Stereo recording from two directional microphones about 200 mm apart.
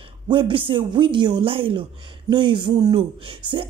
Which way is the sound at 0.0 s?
25° right (ahead or behind).